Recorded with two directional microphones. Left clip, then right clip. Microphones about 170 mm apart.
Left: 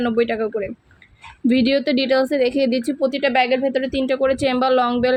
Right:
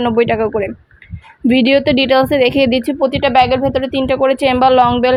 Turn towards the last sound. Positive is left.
turn(degrees=-10)  # may be behind; listen again after turning